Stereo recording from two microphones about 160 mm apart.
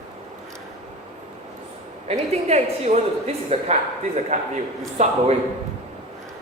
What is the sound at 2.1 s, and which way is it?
A woman's voice, 40° right (ahead or behind).